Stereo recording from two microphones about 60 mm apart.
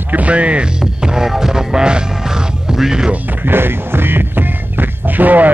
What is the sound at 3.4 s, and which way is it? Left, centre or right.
Music, right.